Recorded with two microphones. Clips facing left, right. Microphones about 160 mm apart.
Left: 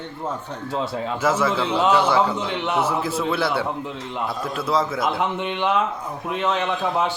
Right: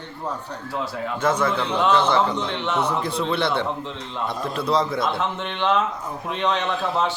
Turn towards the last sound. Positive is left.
turn(degrees=5)  # may be behind; listen again after turning